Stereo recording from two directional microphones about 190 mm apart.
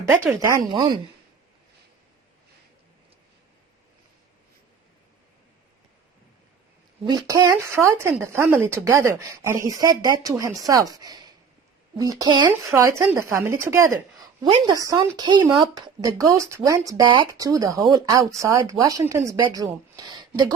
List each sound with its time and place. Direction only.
0.3 s speech: 15° right (ahead or behind)
7.0 s speech: 20° right (ahead or behind)